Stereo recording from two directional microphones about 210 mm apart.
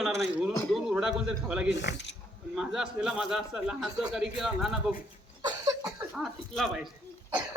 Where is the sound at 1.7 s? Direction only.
55° left (ahead or behind).